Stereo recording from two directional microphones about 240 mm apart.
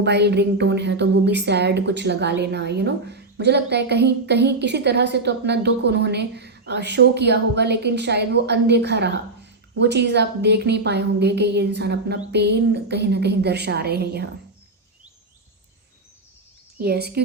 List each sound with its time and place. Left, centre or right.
0.0 s a woman's voice: right
16.8 s speech: right